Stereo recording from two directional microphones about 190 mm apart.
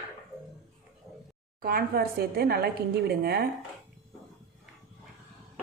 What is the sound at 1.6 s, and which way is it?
A woman's voice, 55° right (ahead or behind).